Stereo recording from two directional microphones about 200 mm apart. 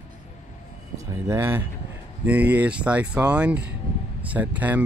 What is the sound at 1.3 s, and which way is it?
Speech, 10° right (ahead or behind).